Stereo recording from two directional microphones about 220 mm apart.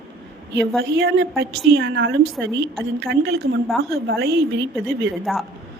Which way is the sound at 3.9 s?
45° right (ahead or behind).